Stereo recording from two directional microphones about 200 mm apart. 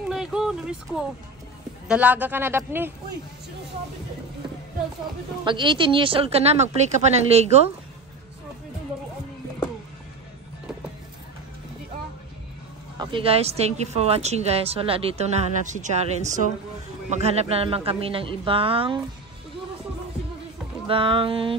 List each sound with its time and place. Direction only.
0.1 s a sound: centre (ahead or behind)
1.9 s a man's voice: 5° right (ahead or behind)
5.4 s speech: 25° right (ahead or behind)
13.0 s a woman's voice: 25° right (ahead or behind)
20.8 s speech: 25° right (ahead or behind)